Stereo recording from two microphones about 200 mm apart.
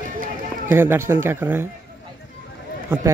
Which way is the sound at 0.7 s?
10° right (ahead or behind).